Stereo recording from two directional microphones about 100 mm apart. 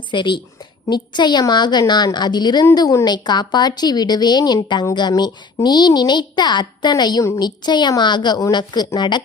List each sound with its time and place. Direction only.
0.1 s a woman's voice: 50° left (ahead or behind)